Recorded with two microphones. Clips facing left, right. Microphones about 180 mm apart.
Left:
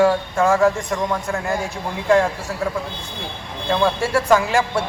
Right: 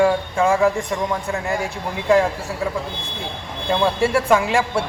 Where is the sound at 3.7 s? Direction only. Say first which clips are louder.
Right 1 dB; centre (ahead or behind).